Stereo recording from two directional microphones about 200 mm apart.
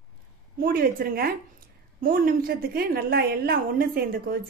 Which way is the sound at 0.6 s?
45° right (ahead or behind).